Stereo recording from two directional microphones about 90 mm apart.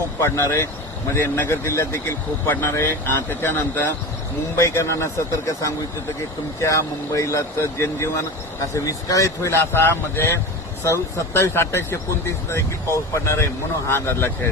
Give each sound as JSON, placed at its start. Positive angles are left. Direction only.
{"t": 0.2, "sound": "speech", "side_deg": 30}
{"t": 6.6, "sound": "speech", "side_deg": 35}